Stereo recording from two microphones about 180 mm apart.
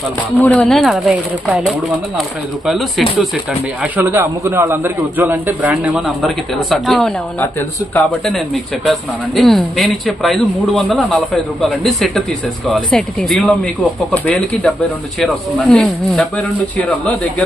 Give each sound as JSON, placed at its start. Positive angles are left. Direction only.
{"t": 0.3, "sound": "speech", "side_deg": 10}
{"t": 3.9, "sound": "a man's voice", "side_deg": -10}
{"t": 15.7, "sound": "speech", "side_deg": 5}